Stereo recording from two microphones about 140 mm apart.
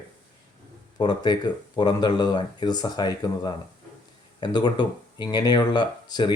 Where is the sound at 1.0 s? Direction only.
30° left (ahead or behind).